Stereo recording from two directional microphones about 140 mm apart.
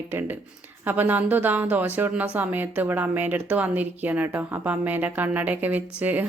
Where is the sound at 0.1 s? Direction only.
15° right (ahead or behind).